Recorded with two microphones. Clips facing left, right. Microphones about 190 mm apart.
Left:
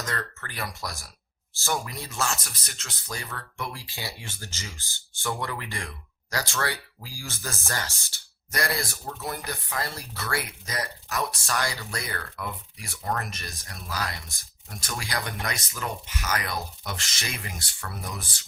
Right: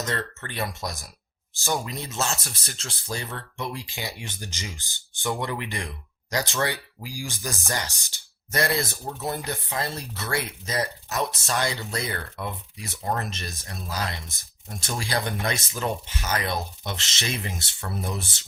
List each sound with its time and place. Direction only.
0.0 s speech: 25° right (ahead or behind)